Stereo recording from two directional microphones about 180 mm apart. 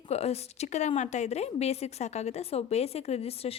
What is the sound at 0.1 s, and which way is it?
A woman's voice, 35° left (ahead or behind).